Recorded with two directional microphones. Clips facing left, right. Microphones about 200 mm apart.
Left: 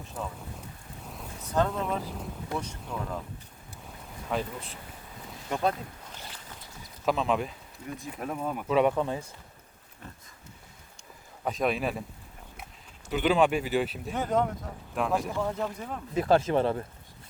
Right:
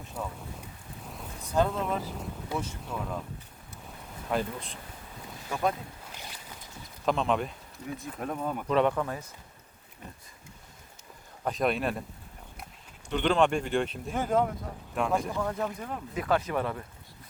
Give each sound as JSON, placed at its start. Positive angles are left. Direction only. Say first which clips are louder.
{"t": 0.1, "sound": "speech", "louder": "even", "side_deg": -5}
{"t": 1.0, "sound": "rain", "louder": "even", "side_deg": 0}
{"t": 1.4, "sound": "speech", "louder": "right 1 dB", "side_deg": -10}
{"t": 3.8, "sound": "a sound", "louder": "right 1 dB", "side_deg": 0}
{"t": 5.2, "sound": "boat", "louder": "even", "side_deg": 0}
{"t": 6.1, "sound": "boat", "louder": "even", "side_deg": -10}
{"t": 7.0, "sound": "speech", "louder": "even", "side_deg": 5}
{"t": 11.4, "sound": "speech", "louder": "even", "side_deg": 0}
{"t": 13.1, "sound": "speech", "louder": "left 1 dB", "side_deg": 5}
{"t": 16.1, "sound": "speech", "louder": "left 5 dB", "side_deg": 30}